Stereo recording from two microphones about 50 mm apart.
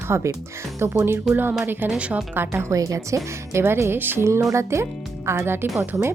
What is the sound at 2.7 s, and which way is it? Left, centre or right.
Speech, right.